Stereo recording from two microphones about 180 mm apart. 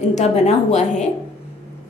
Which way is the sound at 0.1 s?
40° left (ahead or behind).